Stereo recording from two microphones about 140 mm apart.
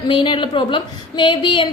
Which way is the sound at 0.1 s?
35° left (ahead or behind).